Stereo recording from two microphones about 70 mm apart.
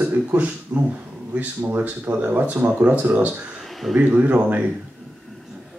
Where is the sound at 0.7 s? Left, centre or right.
Right.